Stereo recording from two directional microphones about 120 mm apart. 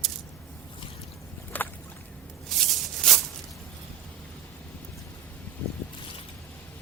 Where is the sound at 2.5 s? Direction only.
Centre (ahead or behind).